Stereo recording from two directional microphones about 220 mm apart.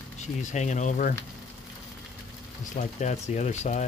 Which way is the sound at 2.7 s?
35° left (ahead or behind).